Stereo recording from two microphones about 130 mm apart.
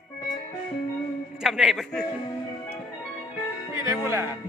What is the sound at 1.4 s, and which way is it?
Speech, 5° right (ahead or behind).